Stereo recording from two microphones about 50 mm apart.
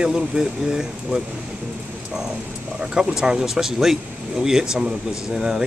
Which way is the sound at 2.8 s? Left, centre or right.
Centre.